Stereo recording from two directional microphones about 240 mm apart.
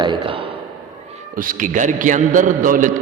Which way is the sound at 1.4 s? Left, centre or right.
Right.